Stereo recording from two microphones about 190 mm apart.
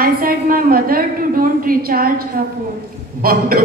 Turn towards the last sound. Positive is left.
turn(degrees=-50)  # may be behind; listen again after turning